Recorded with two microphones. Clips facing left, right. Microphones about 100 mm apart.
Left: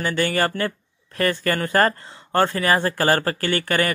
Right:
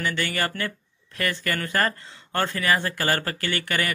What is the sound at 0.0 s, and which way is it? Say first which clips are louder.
Speech: left 5 dB; 35° left (ahead or behind).